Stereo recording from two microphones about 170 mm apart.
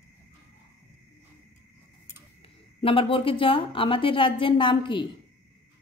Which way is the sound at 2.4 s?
30° left (ahead or behind).